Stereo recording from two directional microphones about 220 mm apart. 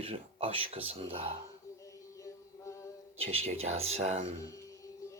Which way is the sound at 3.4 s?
30° right (ahead or behind).